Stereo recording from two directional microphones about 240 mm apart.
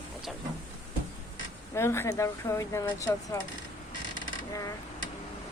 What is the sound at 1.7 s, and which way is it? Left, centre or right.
Speech, centre.